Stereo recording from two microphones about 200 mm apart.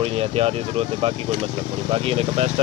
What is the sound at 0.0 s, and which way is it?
Speech, 30° right (ahead or behind).